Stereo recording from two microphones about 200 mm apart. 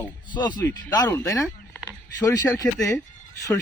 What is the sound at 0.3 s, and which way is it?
A man's voice, 20° left (ahead or behind).